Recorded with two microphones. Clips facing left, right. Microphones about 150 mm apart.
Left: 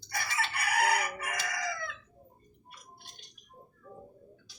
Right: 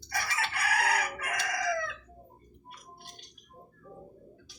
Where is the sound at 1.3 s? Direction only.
90° right.